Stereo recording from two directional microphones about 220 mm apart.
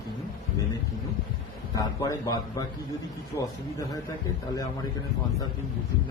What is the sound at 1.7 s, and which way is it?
A man's voice, 15° left (ahead or behind).